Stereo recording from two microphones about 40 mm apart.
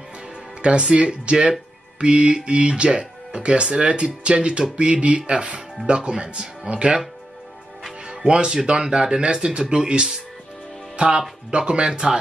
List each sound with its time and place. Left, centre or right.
0.6 s speech: right
8.1 s speech: right
11.1 s speech: right